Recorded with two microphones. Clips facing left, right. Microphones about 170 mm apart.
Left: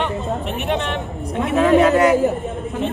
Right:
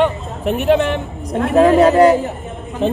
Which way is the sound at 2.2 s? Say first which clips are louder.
Left 6 dB; centre (ahead or behind).